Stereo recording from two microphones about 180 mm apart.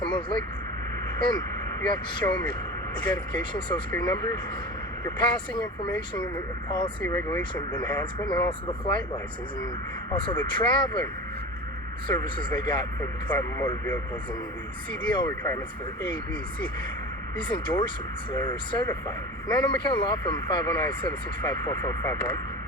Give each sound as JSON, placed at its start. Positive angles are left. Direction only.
{"t": 2.1, "sound": "speech", "side_deg": 25}
{"t": 6.7, "sound": "speech", "side_deg": 25}
{"t": 7.0, "sound": "speech", "side_deg": 15}
{"t": 7.5, "sound": "speech", "side_deg": 25}
{"t": 10.1, "sound": "speech", "side_deg": 25}
{"t": 12.0, "sound": "speech", "side_deg": 25}
{"t": 13.3, "sound": "speech", "side_deg": 15}
{"t": 15.0, "sound": "speech", "side_deg": 25}
{"t": 17.5, "sound": "speech", "side_deg": 25}